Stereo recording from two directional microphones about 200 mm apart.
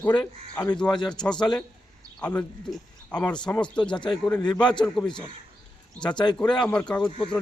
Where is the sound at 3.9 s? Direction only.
25° left (ahead or behind).